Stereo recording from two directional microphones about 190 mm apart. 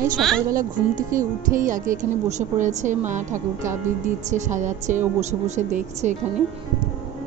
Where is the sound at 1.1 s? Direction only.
45° right (ahead or behind).